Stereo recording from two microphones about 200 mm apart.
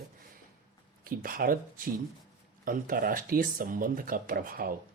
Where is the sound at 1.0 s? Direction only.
45° right (ahead or behind).